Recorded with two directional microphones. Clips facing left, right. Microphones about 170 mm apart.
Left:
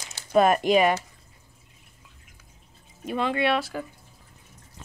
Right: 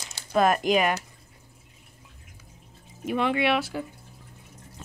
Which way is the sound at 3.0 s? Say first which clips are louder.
Right 1 dB; 10° right (ahead or behind).